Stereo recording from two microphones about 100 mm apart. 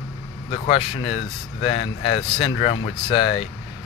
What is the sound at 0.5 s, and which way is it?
Speech, 70° left (ahead or behind).